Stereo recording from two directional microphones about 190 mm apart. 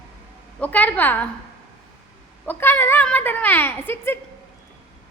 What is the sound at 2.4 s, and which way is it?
A woman's voice, 10° left (ahead or behind).